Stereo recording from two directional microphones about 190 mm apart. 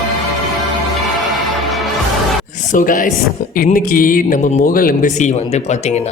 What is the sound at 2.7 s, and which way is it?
A man's voice, 45° left (ahead or behind).